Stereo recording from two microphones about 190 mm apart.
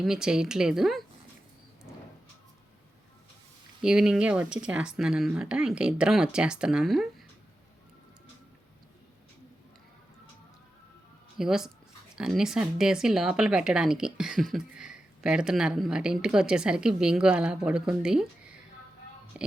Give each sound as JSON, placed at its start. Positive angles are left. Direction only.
{"t": 0.0, "sound": "speech", "side_deg": -5}
{"t": 3.8, "sound": "speech", "side_deg": -5}
{"t": 11.3, "sound": "speech", "side_deg": 0}
{"t": 19.3, "sound": "music", "side_deg": -5}